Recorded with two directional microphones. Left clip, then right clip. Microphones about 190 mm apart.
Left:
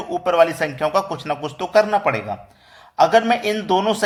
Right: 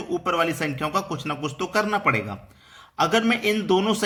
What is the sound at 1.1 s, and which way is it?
Speech, 50° right (ahead or behind).